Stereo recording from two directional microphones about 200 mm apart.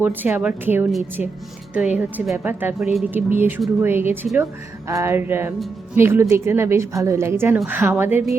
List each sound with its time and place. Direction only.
0.0 s a woman's voice: 10° right (ahead or behind)